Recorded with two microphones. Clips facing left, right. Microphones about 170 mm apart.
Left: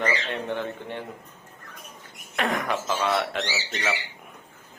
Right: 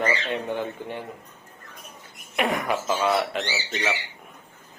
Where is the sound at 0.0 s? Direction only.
10° right (ahead or behind).